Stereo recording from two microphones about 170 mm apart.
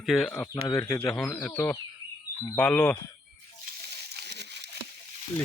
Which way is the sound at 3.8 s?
75° right (ahead or behind).